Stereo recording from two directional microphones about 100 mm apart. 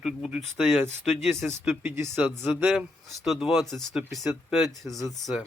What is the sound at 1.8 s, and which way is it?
Speech, 25° right (ahead or behind).